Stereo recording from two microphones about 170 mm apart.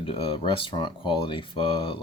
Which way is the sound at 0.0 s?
30° left (ahead or behind).